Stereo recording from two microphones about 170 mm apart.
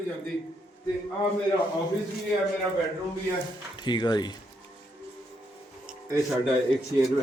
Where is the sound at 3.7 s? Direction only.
25° left (ahead or behind).